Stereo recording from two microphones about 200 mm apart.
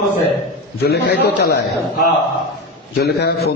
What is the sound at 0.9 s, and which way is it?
Speech, 55° left (ahead or behind).